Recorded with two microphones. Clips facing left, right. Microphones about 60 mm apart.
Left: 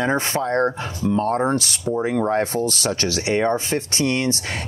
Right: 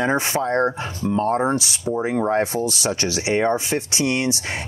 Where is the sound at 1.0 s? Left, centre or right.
Right.